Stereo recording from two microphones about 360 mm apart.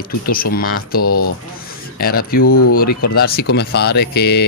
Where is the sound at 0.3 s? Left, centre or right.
Left.